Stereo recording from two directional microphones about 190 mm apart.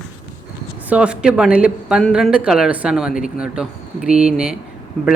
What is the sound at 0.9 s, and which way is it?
Speech, 5° right (ahead or behind).